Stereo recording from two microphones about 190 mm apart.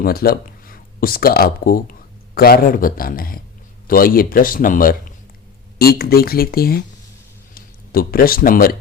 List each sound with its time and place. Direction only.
0.0 s a man's voice: 50° left (ahead or behind)